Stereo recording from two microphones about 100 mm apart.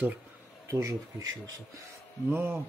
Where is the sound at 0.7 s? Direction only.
30° right (ahead or behind).